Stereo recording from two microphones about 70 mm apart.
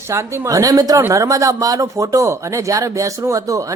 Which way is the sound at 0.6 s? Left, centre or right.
Right.